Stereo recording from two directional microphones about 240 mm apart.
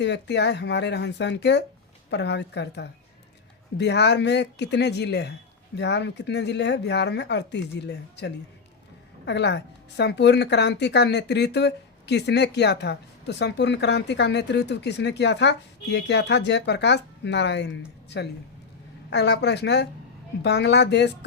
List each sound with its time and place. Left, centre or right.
0.0 s speech: left